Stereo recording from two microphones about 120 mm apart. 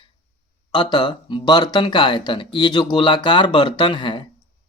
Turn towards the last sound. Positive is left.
turn(degrees=45)  # may be behind; listen again after turning